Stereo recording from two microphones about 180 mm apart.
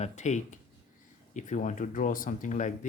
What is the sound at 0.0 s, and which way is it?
Speech, 40° left (ahead or behind).